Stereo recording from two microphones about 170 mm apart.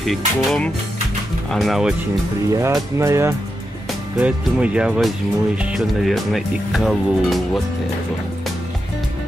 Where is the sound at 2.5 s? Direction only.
20° right (ahead or behind).